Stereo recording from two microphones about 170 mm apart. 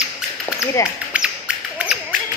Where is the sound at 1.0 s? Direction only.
10° right (ahead or behind).